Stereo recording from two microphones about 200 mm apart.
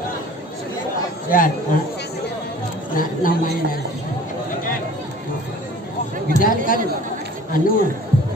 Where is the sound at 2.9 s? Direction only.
45° left (ahead or behind).